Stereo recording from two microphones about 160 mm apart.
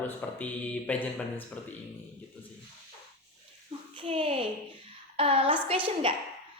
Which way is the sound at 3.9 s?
35° right (ahead or behind).